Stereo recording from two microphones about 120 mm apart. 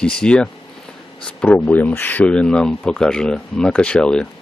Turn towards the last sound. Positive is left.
turn(degrees=10)  # may be behind; listen again after turning